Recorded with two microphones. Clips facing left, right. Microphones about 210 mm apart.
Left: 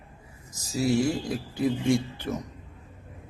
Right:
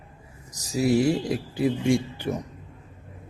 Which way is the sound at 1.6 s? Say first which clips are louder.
Right 1 dB; 10° right (ahead or behind).